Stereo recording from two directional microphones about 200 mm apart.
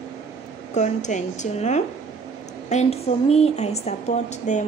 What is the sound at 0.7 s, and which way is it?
A woman's voice, 35° left (ahead or behind).